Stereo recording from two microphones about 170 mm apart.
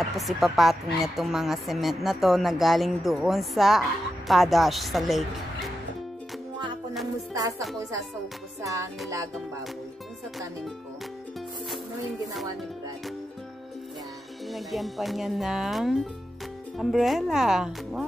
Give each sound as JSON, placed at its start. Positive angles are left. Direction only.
{"t": 0.0, "sound": "speech", "side_deg": 0}
{"t": 7.3, "sound": "speech", "side_deg": -20}
{"t": 14.5, "sound": "speech", "side_deg": 0}